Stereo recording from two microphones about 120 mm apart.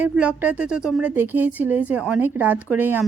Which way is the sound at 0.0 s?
10° right (ahead or behind).